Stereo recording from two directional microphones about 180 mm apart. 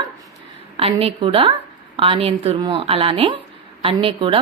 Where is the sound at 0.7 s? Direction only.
30° right (ahead or behind).